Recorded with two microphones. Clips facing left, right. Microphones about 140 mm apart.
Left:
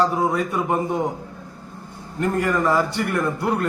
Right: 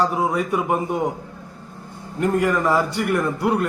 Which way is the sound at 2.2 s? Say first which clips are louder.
Right 2 dB; 5° right (ahead or behind).